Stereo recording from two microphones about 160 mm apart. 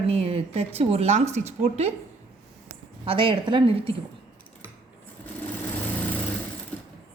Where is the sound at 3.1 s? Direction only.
35° right (ahead or behind).